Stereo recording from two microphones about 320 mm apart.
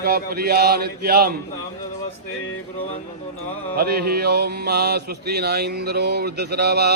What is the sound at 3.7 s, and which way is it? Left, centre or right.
Mantra, right.